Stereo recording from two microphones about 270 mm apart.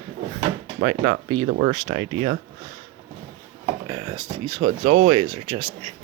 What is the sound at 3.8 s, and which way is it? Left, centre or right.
Speech, centre.